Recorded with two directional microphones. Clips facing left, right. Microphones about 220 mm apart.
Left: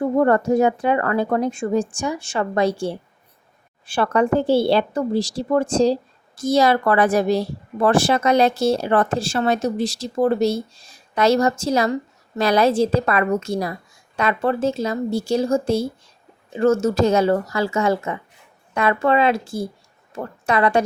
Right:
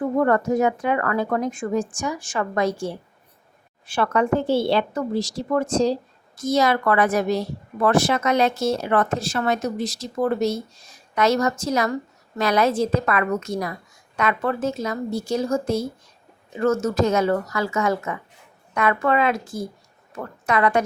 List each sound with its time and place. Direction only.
0.2 s a woman's voice: 30° left (ahead or behind)